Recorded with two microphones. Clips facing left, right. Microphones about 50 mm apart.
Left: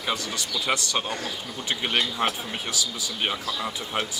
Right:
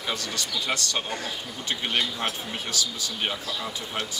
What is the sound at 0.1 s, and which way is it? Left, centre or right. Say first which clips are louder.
Speech: left 2 dB; centre.